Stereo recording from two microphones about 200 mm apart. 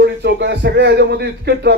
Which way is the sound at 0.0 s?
60° right (ahead or behind).